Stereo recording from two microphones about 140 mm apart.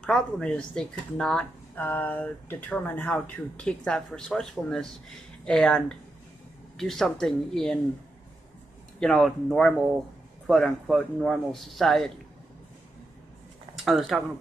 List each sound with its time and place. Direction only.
0.0 s speech: 5° left (ahead or behind)
9.0 s speech: 5° left (ahead or behind)
13.8 s speech: centre (ahead or behind)